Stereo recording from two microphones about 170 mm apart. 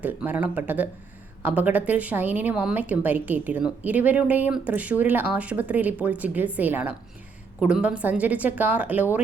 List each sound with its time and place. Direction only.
0.0 s a woman's voice: 10° right (ahead or behind)